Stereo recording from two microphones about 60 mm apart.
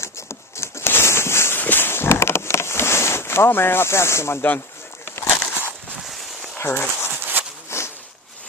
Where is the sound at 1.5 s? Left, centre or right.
Left.